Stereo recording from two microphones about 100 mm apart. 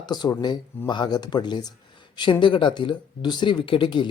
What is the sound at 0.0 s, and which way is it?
Speech, 45° left (ahead or behind).